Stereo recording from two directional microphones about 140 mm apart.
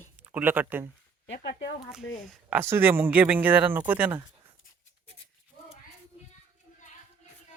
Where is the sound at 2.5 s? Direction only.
15° right (ahead or behind).